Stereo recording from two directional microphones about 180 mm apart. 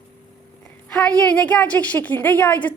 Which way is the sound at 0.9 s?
5° left (ahead or behind).